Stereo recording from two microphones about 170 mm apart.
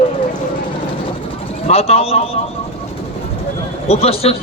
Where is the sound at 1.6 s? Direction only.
35° left (ahead or behind).